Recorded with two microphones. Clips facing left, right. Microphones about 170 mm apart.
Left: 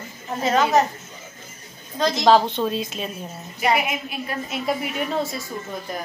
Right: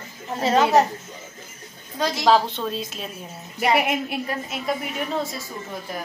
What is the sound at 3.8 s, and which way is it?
Speech, 60° right (ahead or behind).